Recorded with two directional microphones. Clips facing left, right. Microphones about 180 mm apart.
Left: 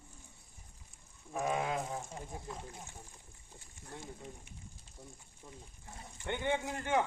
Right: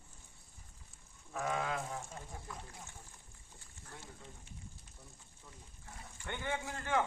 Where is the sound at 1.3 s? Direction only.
15° left (ahead or behind).